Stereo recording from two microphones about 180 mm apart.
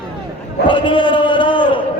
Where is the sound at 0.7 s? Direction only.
25° left (ahead or behind).